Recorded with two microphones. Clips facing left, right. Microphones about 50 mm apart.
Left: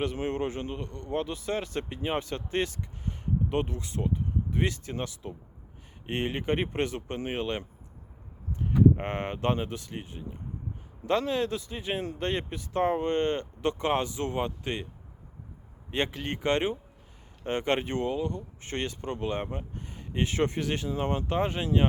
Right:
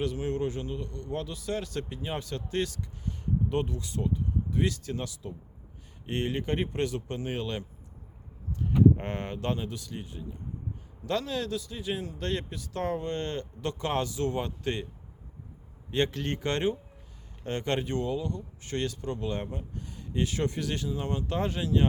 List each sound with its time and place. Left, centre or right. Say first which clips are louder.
0.0 s speech: even; left
15.9 s speech: right 2 dB; centre